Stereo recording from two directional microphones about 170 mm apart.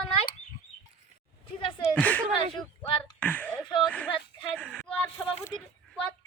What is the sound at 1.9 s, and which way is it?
Speech, 10° left (ahead or behind).